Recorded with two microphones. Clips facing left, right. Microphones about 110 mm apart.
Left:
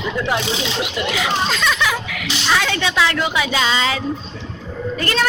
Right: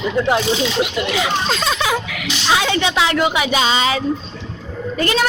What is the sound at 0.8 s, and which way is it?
Speech, 30° right (ahead or behind).